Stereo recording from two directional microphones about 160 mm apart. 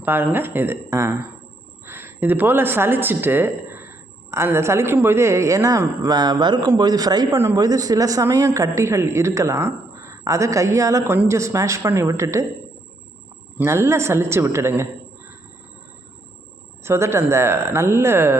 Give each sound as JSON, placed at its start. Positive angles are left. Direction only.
{"t": 0.0, "sound": "speech", "side_deg": -15}
{"t": 13.6, "sound": "speech", "side_deg": -15}
{"t": 16.8, "sound": "speech", "side_deg": -15}